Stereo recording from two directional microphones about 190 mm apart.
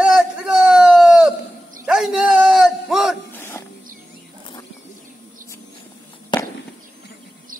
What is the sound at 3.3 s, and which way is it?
Dog, 15° left (ahead or behind).